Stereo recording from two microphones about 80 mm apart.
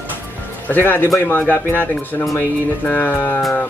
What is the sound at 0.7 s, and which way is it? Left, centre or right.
Speech, left.